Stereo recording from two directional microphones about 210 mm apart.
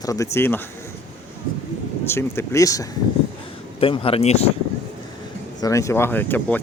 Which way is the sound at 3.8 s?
25° left (ahead or behind).